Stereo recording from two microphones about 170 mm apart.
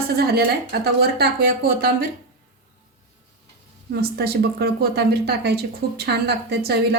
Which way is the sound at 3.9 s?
70° right (ahead or behind).